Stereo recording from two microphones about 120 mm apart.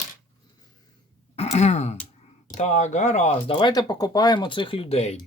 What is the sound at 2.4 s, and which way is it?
Speech, 85° left.